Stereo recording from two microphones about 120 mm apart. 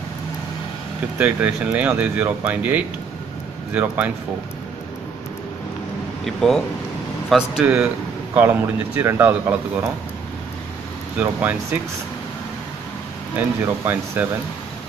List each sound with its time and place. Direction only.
1.1 s speech: 15° right (ahead or behind)
6.2 s speech: centre (ahead or behind)
7.6 s speech: 20° right (ahead or behind)
11.1 s speech: 15° right (ahead or behind)
13.4 s speech: 15° right (ahead or behind)